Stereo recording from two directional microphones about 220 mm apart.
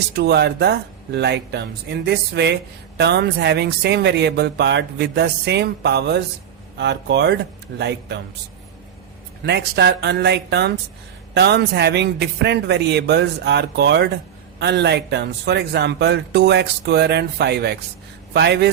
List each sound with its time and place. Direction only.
0.2 s speech: 50° right (ahead or behind)
9.5 s speech: 50° right (ahead or behind)